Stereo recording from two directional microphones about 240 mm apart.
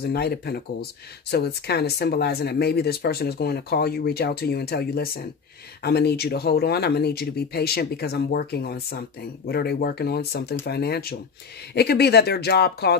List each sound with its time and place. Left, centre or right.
0.0 s speech: left